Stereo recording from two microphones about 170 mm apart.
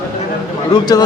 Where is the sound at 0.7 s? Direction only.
25° left (ahead or behind).